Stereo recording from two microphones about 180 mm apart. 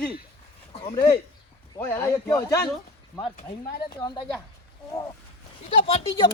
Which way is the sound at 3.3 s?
60° left (ahead or behind).